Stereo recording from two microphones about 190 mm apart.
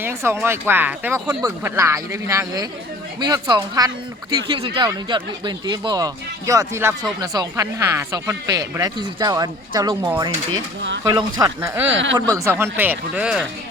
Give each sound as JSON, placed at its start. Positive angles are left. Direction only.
{"t": 0.0, "sound": "speech", "side_deg": -15}
{"t": 11.9, "sound": "speech", "side_deg": -75}
{"t": 12.3, "sound": "speech", "side_deg": -10}